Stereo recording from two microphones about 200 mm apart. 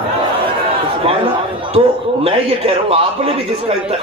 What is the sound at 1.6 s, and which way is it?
A man's voice, 25° right (ahead or behind).